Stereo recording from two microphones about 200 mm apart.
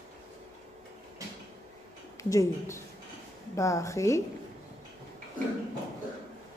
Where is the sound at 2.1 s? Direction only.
15° left (ahead or behind).